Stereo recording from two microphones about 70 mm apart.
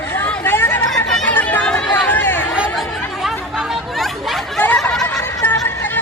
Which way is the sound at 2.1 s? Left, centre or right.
Left.